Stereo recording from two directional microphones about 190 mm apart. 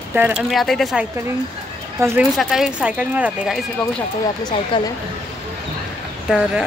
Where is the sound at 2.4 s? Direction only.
Centre (ahead or behind).